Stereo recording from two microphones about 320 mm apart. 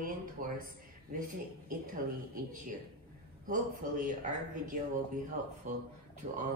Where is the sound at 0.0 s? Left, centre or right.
Right.